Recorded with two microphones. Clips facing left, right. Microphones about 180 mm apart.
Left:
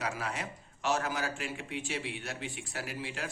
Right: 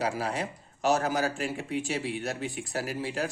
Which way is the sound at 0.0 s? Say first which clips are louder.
Right 6 dB; 30° right (ahead or behind).